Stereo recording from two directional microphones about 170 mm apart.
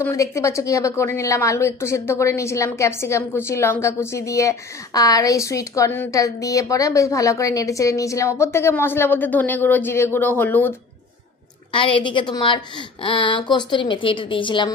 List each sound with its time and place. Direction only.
0.0 s speech: 15° left (ahead or behind)
11.7 s a woman's voice: 30° left (ahead or behind)